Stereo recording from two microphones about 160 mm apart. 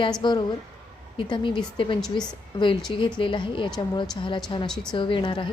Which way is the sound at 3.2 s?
30° left (ahead or behind).